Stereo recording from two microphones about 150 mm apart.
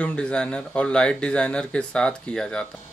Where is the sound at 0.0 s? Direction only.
5° left (ahead or behind).